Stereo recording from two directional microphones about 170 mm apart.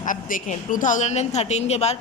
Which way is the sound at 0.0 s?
50° left (ahead or behind).